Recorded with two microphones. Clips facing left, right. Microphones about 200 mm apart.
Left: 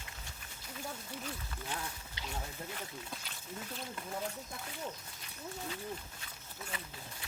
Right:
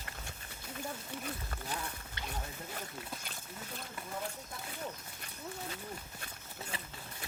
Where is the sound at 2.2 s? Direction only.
55° right (ahead or behind).